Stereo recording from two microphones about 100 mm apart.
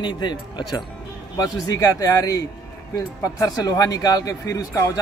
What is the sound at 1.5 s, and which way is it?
Speech, 40° left (ahead or behind).